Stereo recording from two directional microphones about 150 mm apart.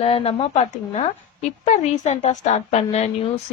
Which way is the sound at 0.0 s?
40° left (ahead or behind).